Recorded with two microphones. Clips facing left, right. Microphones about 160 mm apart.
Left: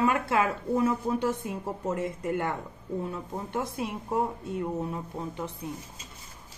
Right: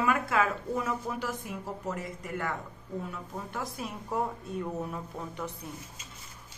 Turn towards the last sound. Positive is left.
turn(degrees=20)  # may be behind; listen again after turning